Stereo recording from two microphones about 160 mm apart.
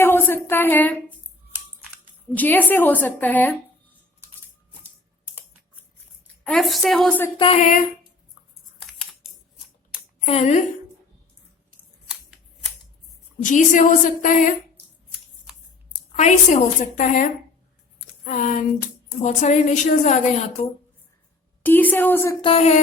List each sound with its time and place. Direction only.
0.0 s a woman's voice: 15° left (ahead or behind)
2.3 s a woman's voice: 10° left (ahead or behind)
6.4 s a woman's voice: centre (ahead or behind)
7.3 s speech: 35° left (ahead or behind)
8.8 s typing: centre (ahead or behind)
10.2 s a woman's voice: 45° left (ahead or behind)
13.4 s a woman's voice: 50° left (ahead or behind)
16.1 s a woman's voice: 45° left (ahead or behind)
21.6 s a woman's voice: 10° left (ahead or behind)
22.4 s speech: 35° left (ahead or behind)